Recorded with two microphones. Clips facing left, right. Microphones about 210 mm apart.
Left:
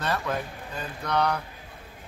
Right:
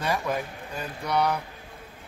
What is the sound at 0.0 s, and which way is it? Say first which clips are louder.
Speech: right 1 dB; 10° right (ahead or behind).